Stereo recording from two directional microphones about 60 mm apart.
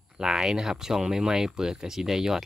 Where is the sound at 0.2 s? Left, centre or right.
Centre.